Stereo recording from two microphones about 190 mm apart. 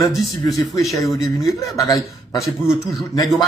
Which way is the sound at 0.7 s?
15° left (ahead or behind).